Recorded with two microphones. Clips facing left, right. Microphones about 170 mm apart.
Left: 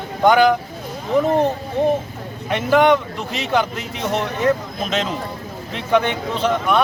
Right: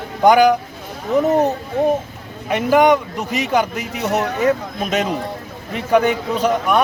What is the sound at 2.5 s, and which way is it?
Speech, 10° right (ahead or behind).